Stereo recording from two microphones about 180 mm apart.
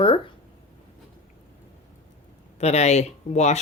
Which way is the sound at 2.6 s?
40° left (ahead or behind).